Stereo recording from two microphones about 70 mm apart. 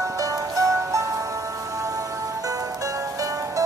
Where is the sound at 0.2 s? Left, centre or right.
Right.